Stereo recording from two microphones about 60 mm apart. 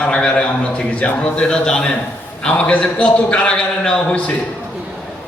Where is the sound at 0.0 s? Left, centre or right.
Centre.